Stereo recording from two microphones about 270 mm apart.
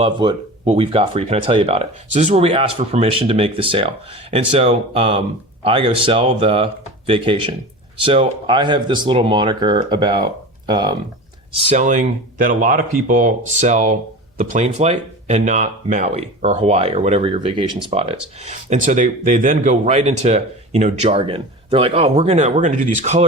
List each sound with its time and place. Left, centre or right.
0.0 s speech: centre
11.7 s speech: right